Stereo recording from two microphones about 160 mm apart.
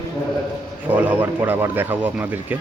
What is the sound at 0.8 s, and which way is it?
Speech, 10° right (ahead or behind).